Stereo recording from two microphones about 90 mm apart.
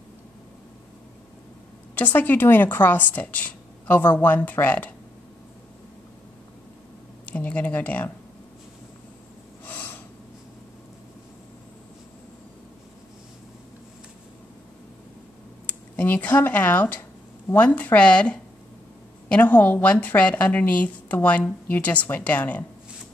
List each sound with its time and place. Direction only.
2.0 s a woman's voice: 20° left (ahead or behind)
7.2 s a woman's voice: 15° left (ahead or behind)
9.7 s gasp: 20° left (ahead or behind)
15.6 s a woman's voice: 20° left (ahead or behind)
17.7 s a woman's voice: 15° left (ahead or behind)